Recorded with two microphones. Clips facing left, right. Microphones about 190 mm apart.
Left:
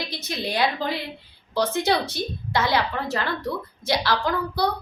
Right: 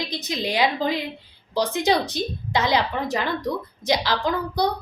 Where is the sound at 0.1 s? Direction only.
15° right (ahead or behind).